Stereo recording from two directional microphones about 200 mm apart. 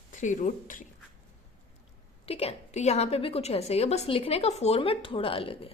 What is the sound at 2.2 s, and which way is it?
A woman's voice, 30° left (ahead or behind).